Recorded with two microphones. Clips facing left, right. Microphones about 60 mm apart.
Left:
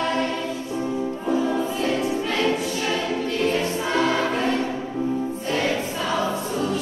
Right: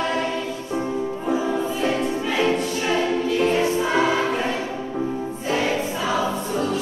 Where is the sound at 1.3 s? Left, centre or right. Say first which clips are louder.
Even; centre.